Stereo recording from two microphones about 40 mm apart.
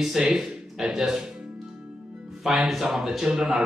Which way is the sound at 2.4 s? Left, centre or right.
Centre.